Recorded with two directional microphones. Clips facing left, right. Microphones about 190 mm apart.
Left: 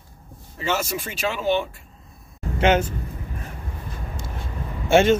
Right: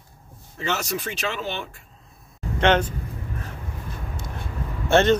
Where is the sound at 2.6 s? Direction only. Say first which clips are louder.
Left 1 dB; 10° left (ahead or behind).